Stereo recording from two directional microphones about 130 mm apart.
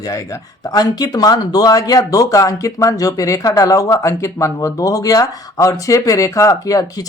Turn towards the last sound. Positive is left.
turn(degrees=25)  # may be behind; listen again after turning